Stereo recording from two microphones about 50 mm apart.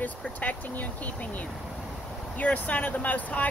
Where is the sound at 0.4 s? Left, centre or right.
Left.